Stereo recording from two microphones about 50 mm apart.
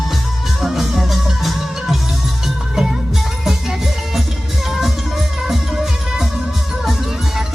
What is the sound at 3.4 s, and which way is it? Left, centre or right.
Music, centre.